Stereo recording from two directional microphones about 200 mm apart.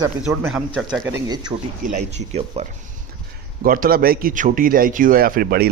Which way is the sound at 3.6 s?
45° right (ahead or behind).